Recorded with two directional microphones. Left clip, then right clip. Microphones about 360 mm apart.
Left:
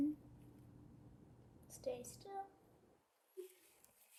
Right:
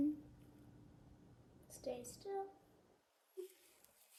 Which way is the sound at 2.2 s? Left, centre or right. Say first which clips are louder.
Right 5 dB; left.